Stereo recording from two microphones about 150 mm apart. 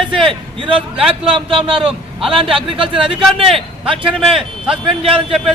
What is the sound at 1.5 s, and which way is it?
Speech, 35° right (ahead or behind).